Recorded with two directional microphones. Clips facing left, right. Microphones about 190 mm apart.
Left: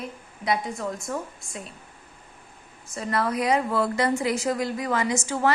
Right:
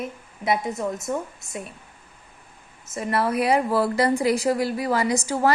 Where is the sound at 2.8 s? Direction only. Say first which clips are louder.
Right 2 dB; 20° right (ahead or behind).